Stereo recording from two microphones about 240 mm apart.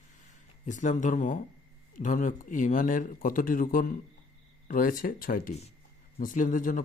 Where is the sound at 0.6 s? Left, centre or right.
Left.